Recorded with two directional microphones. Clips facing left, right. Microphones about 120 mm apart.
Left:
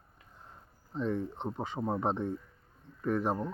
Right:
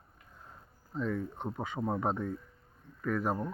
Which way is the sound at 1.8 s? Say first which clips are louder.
Even; 10° left (ahead or behind).